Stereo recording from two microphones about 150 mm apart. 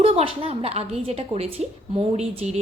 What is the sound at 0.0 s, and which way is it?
A woman's voice, 40° right (ahead or behind).